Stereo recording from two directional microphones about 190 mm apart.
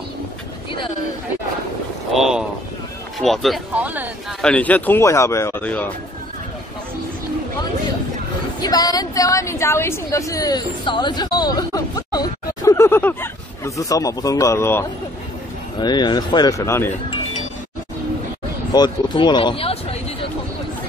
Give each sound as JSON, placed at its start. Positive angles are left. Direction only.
{"t": 2.1, "sound": "a sound", "side_deg": 0}
{"t": 3.2, "sound": "speech", "side_deg": 0}
{"t": 4.4, "sound": "a woman's voice", "side_deg": 5}
{"t": 8.6, "sound": "a woman's voice", "side_deg": 20}
{"t": 15.8, "sound": "speech", "side_deg": 20}
{"t": 18.7, "sound": "speech", "side_deg": 20}